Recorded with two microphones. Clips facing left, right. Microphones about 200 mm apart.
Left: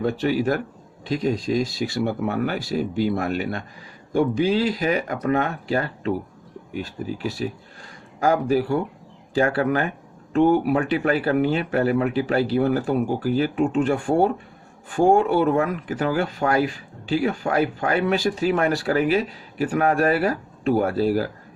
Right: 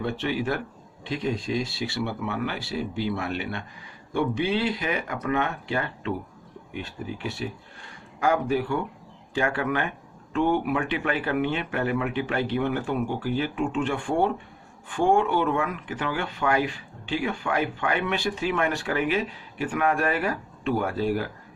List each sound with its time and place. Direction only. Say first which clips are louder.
0.0 s speech: left 6 dB; 40° left (ahead or behind)